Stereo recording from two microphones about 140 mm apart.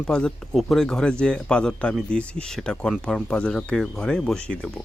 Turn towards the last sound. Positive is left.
turn(degrees=5)  # may be behind; listen again after turning